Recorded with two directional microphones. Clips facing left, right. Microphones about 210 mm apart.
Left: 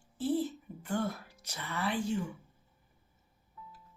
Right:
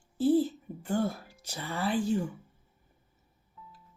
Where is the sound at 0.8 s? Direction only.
30° right (ahead or behind).